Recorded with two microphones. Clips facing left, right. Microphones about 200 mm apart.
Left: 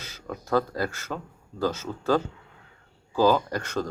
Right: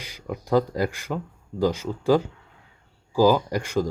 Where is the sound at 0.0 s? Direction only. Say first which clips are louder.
Right 3 dB; 15° right (ahead or behind).